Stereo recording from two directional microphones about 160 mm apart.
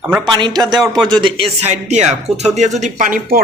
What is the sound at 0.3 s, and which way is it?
A man's voice, 30° right (ahead or behind).